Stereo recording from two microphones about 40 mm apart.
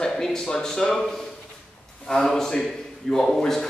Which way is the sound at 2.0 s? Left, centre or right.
Centre.